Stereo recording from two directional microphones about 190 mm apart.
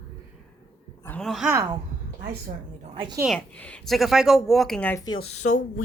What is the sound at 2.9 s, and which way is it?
Speech, 25° right (ahead or behind).